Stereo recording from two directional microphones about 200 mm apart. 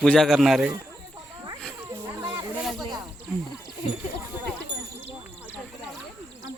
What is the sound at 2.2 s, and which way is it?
Snake, 10° right (ahead or behind).